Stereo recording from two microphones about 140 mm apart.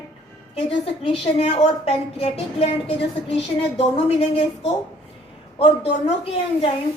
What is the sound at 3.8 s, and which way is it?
A woman's voice, 45° left (ahead or behind).